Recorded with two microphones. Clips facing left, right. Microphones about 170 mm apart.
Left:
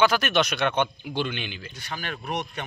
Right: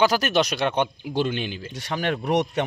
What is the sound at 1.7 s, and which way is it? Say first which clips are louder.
Speech: right 11 dB; 75° right (ahead or behind).